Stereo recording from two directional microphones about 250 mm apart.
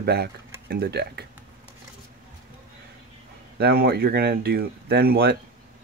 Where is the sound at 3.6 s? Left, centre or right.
Right.